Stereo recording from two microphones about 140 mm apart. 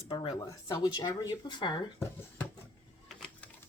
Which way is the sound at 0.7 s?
25° left (ahead or behind).